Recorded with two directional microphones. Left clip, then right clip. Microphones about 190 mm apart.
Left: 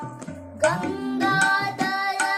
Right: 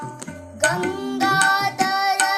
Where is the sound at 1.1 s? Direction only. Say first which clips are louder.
Right 3 dB; 10° left (ahead or behind).